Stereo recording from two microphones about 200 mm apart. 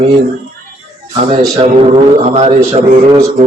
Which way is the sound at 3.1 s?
15° right (ahead or behind).